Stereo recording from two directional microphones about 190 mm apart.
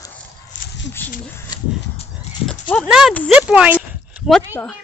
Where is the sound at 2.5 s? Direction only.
5° left (ahead or behind).